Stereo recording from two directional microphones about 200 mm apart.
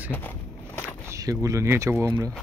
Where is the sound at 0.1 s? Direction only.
10° left (ahead or behind).